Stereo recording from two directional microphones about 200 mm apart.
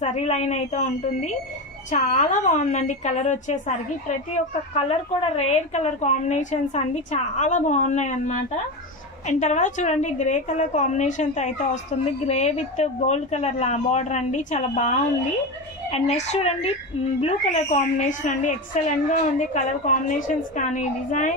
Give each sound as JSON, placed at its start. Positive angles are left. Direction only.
{"t": 0.0, "sound": "a woman's voice", "side_deg": 35}
{"t": 4.7, "sound": "a woman's voice", "side_deg": 30}
{"t": 9.3, "sound": "a woman's voice", "side_deg": 35}